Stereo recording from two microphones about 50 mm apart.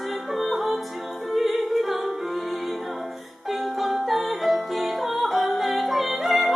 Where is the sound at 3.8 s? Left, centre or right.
Centre.